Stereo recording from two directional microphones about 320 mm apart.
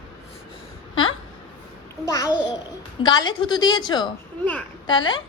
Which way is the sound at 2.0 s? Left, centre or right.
Centre.